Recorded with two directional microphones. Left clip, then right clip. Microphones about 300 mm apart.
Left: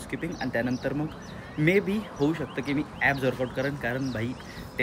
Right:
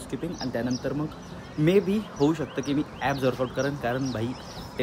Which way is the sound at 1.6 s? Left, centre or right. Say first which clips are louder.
Right 2 dB; centre.